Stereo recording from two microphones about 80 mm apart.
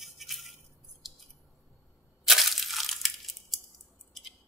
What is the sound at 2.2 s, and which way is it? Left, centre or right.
Crushing, centre.